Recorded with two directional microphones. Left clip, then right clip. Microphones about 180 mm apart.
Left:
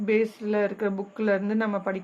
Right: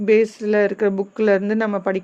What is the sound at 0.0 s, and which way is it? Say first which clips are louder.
Speech: right 8 dB; 30° right (ahead or behind).